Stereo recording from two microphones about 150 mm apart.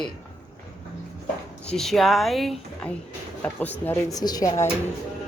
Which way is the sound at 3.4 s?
10° left (ahead or behind).